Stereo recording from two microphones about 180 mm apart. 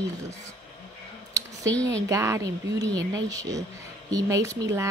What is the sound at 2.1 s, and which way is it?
Speech, 15° right (ahead or behind).